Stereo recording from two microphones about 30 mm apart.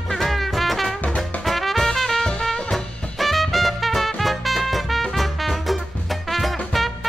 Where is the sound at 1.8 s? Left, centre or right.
Centre.